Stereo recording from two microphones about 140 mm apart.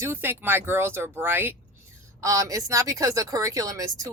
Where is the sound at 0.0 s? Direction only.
15° right (ahead or behind).